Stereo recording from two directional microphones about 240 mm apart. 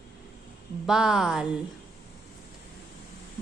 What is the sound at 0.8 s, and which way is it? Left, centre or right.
Speech, centre.